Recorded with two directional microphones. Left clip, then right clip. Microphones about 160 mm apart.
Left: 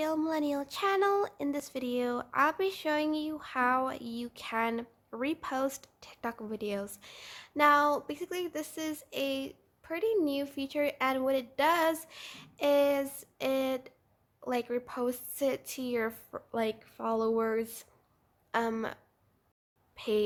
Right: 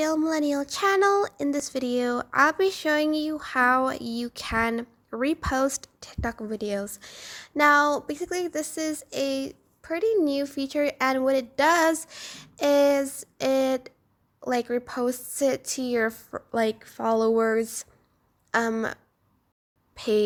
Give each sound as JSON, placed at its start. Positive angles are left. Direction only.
{"t": 0.3, "sound": "speech", "side_deg": -30}
{"t": 20.0, "sound": "speech", "side_deg": -35}